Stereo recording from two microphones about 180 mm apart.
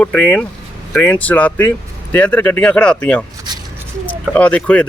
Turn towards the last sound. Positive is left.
turn(degrees=5)  # may be behind; listen again after turning